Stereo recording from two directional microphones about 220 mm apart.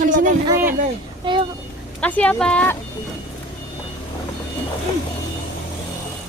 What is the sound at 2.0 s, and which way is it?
Speech, 5° left (ahead or behind).